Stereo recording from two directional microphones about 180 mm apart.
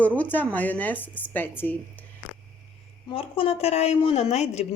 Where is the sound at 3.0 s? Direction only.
30° left (ahead or behind).